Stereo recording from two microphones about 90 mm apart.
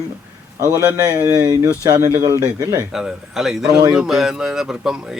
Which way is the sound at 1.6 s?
35° right (ahead or behind).